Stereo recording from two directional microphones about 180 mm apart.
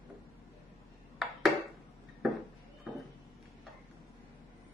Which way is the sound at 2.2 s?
Centre (ahead or behind).